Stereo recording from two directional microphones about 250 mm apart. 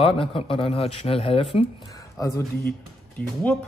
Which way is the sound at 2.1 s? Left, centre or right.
Centre.